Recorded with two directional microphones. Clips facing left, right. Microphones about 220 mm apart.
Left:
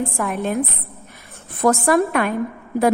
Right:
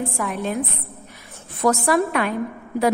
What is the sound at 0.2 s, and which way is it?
Speech, 50° left (ahead or behind).